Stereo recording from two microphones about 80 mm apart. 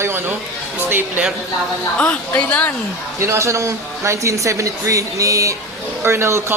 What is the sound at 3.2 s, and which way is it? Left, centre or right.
Speech, right.